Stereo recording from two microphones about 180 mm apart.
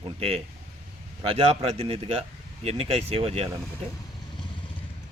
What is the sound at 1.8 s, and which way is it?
Speech, 35° right (ahead or behind).